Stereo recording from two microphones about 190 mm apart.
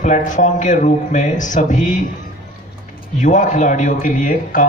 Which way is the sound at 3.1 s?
40° left (ahead or behind).